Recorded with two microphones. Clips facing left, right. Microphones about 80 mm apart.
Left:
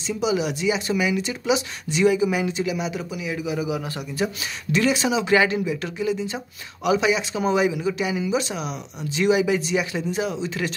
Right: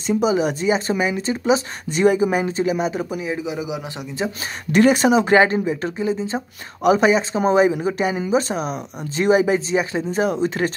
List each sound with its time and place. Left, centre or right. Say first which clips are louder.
0.0 s speech: right 5 dB; right
3.3 s a man's voice: even; right
4.7 s speech: right 7 dB; right